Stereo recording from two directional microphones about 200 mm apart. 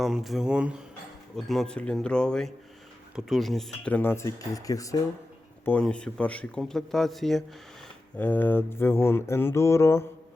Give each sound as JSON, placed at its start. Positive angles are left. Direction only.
{"t": 0.0, "sound": "speech", "side_deg": 0}
{"t": 5.6, "sound": "speech", "side_deg": 5}